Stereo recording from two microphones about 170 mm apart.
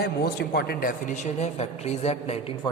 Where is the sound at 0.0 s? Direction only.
70° left (ahead or behind); by 2.5 s 40° left (ahead or behind).